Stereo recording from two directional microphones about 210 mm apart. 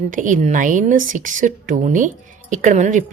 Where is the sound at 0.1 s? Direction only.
35° right (ahead or behind).